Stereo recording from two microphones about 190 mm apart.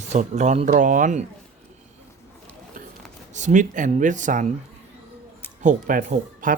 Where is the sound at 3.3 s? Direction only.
40° right (ahead or behind).